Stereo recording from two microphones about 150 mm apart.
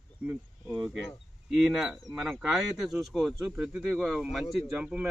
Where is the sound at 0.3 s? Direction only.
5° right (ahead or behind).